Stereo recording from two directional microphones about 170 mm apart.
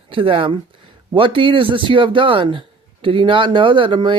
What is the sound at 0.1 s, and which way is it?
Speech, 30° right (ahead or behind).